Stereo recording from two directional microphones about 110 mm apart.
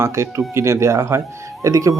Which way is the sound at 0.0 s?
25° right (ahead or behind).